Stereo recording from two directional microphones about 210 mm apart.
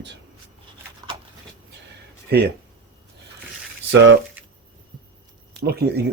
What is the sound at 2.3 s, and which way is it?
Speech, 50° right (ahead or behind).